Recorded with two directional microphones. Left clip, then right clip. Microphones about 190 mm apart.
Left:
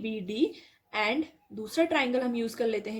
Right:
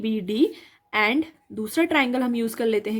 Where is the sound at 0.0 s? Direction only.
45° right (ahead or behind).